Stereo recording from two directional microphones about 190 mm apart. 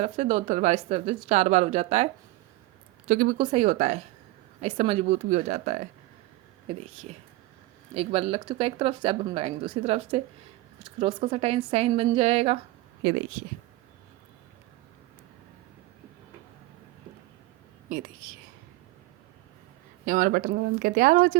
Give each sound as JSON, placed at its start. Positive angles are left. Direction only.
{"t": 0.0, "sound": "speech", "side_deg": -35}
{"t": 3.1, "sound": "speech", "side_deg": -45}
{"t": 3.3, "sound": "speech", "side_deg": -30}
{"t": 13.0, "sound": "speech", "side_deg": -70}
{"t": 20.1, "sound": "speech", "side_deg": -45}